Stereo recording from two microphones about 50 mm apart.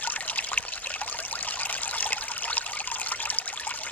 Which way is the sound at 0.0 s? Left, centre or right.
Left.